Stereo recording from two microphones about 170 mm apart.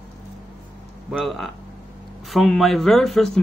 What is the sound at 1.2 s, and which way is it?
Speech, centre (ahead or behind).